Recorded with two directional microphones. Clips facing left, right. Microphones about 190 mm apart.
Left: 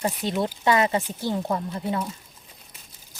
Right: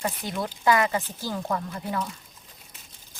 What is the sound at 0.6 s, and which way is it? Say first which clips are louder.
Speech: even; 25° left (ahead or behind).